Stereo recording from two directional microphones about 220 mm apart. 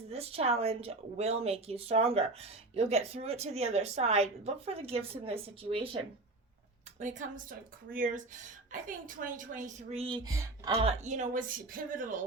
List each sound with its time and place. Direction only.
0.1 s speech: 25° right (ahead or behind)
7.0 s a woman's voice: 35° right (ahead or behind); by 10.5 s 15° right (ahead or behind)
10.7 s a woman's voice: 30° right (ahead or behind)